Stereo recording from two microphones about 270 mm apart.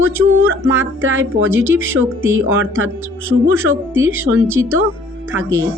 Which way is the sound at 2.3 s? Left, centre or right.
Right.